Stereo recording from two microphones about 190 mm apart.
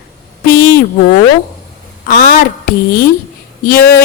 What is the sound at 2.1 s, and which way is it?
Speech, 50° left (ahead or behind).